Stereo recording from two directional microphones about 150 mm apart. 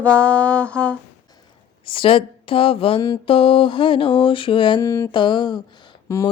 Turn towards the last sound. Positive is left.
turn(degrees=20)  # may be behind; listen again after turning